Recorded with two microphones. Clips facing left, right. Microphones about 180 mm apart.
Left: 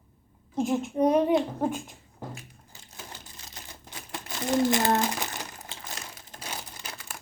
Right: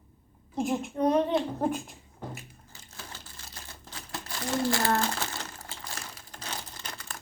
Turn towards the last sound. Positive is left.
turn(degrees=5)  # may be behind; listen again after turning